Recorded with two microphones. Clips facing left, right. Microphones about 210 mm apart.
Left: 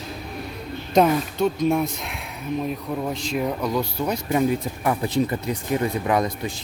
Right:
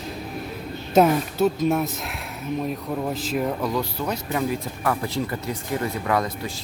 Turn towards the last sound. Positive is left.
turn(degrees=15)  # may be behind; listen again after turning